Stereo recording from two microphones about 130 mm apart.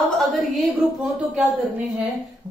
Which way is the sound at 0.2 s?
Centre (ahead or behind).